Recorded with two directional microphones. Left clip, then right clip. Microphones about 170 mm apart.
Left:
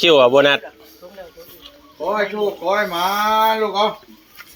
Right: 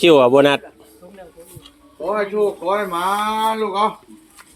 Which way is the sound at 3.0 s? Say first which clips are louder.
Left 3 dB; 10° left (ahead or behind).